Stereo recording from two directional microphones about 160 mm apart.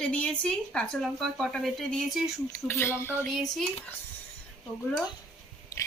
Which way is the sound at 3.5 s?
Centre (ahead or behind).